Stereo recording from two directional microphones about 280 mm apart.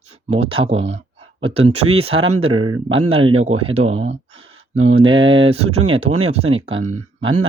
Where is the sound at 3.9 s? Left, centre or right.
Right.